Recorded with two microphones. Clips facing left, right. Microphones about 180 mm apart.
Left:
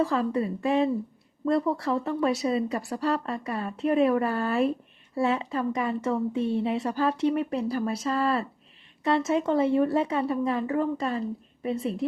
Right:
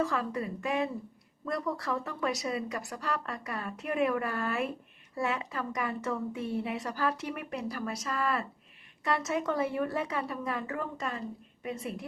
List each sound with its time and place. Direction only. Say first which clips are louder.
0.0 s a woman's voice: left 6 dB; 30° left (ahead or behind)